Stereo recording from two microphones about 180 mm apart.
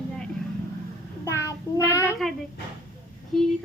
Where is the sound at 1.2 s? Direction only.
15° left (ahead or behind).